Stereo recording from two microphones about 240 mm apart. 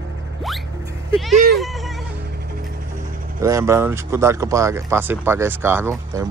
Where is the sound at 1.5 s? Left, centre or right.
Centre.